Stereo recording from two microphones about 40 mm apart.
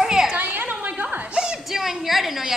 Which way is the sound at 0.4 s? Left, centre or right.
Right.